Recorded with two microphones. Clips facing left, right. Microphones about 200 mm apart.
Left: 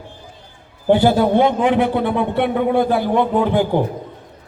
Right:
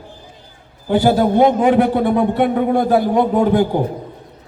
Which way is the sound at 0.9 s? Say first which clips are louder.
Right 1 dB; 40° right (ahead or behind).